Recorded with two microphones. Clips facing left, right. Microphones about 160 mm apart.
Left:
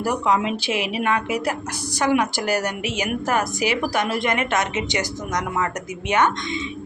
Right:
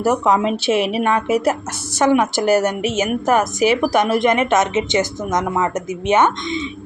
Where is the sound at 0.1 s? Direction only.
40° right (ahead or behind).